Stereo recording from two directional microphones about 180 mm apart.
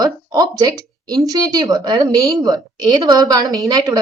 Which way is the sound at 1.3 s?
20° right (ahead or behind).